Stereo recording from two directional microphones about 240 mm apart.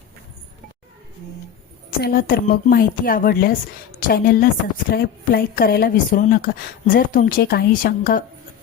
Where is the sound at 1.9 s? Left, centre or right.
Left.